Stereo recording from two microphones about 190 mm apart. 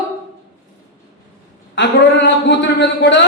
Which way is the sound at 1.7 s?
65° left (ahead or behind).